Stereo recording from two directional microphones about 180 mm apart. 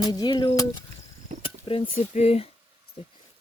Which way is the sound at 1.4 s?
30° left (ahead or behind).